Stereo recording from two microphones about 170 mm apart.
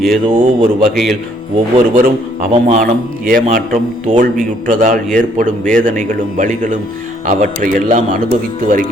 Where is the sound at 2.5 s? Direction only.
35° right (ahead or behind).